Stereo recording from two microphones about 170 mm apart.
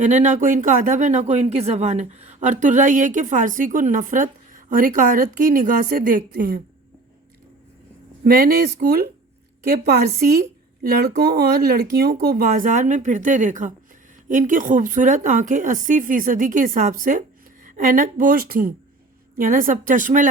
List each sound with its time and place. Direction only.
0.0 s speech: 45° right (ahead or behind)
8.2 s a woman's voice: 60° right (ahead or behind)